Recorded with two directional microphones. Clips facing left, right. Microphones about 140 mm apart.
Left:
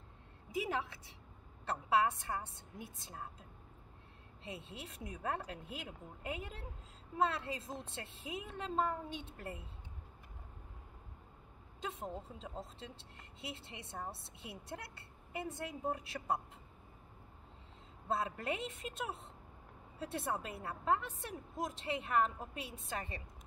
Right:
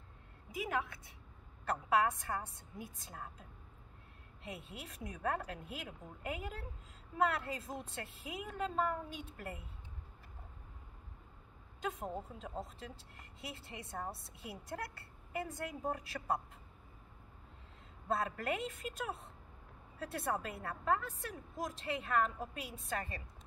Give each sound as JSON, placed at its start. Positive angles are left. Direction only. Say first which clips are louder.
{"t": 0.5, "sound": "a woman's voice", "louder": "even", "side_deg": 30}
{"t": 4.4, "sound": "a woman's voice", "louder": "even", "side_deg": 25}
{"t": 11.8, "sound": "a woman's voice", "louder": "right 3 dB", "side_deg": 25}
{"t": 18.0, "sound": "a woman's voice", "louder": "right 1 dB", "side_deg": 25}